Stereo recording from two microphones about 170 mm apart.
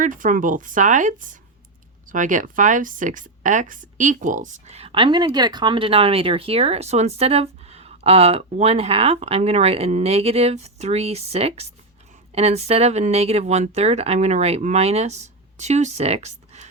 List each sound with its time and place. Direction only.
0.0 s speech: 50° right (ahead or behind)